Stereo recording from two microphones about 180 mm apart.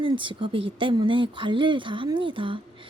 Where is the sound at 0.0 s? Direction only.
30° right (ahead or behind).